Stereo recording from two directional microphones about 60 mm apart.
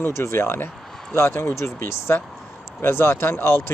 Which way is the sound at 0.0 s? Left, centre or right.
Left.